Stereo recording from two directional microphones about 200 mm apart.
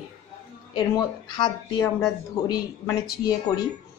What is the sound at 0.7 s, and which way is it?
Speech, 20° left (ahead or behind).